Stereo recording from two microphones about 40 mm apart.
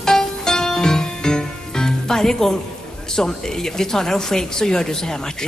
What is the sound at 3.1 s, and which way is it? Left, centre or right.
Speech, centre.